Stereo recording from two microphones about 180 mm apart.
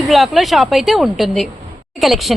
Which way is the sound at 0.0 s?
Centre (ahead or behind).